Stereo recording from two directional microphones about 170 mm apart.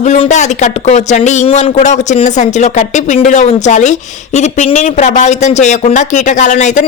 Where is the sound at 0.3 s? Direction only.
45° left (ahead or behind).